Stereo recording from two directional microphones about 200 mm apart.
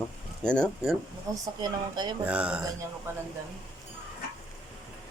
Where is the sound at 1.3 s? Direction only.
20° right (ahead or behind).